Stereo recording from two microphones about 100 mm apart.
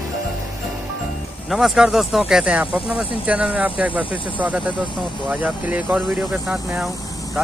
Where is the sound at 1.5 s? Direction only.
5° right (ahead or behind).